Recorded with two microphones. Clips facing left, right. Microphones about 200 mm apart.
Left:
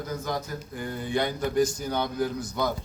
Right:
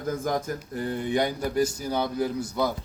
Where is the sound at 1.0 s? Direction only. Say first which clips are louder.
Even; 15° right (ahead or behind).